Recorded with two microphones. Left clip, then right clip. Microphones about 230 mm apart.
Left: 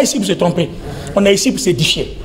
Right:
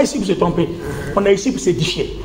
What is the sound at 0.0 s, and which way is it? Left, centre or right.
A man's voice, left.